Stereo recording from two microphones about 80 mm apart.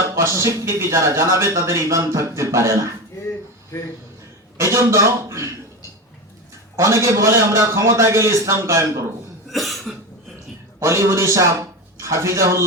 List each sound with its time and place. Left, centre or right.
0.2 s speech: right
4.5 s speech: right
6.7 s speech: right
9.5 s cough: centre
10.8 s speech: right